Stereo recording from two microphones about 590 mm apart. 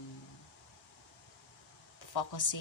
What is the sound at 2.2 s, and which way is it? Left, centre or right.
Speech, left.